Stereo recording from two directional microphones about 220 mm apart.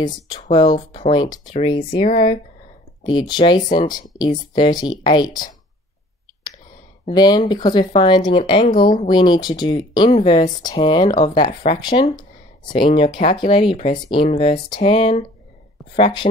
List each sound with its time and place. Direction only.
0.4 s speech: 20° left (ahead or behind)
2.0 s speech: 40° left (ahead or behind)
3.0 s speech: 20° left (ahead or behind)
7.1 s speech: 20° left (ahead or behind)